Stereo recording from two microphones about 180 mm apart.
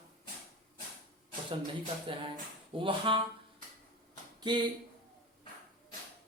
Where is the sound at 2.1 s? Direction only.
30° right (ahead or behind).